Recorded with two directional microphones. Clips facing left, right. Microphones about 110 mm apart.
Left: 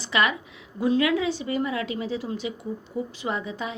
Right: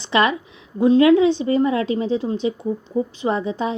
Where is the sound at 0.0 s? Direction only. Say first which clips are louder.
Right 6 dB; 30° right (ahead or behind).